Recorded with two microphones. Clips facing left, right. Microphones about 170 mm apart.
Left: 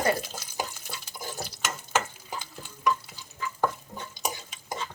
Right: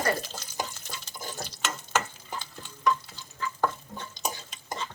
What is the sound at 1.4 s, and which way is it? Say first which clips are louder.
Stir: even; 10° left (ahead or behind).